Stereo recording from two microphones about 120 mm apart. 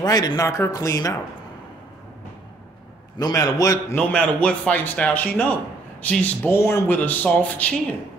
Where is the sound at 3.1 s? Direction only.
35° left (ahead or behind).